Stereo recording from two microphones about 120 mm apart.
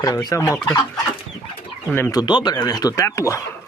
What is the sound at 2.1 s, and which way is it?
Speech, 40° left (ahead or behind).